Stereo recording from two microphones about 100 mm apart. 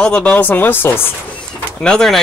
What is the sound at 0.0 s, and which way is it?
Speech, 10° left (ahead or behind).